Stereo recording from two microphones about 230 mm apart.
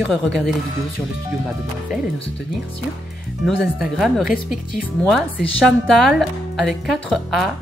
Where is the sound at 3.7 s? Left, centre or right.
Centre.